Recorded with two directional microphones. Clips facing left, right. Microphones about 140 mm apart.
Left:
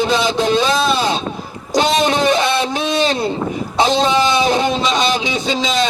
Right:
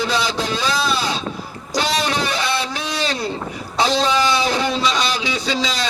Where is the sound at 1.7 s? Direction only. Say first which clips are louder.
Left 6 dB; 20° left (ahead or behind).